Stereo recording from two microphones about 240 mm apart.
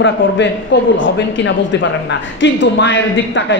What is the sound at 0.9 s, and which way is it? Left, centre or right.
A woman's voice, left.